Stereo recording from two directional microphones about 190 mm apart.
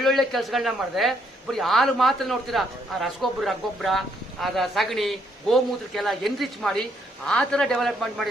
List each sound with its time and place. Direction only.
0.0 s speech: centre (ahead or behind)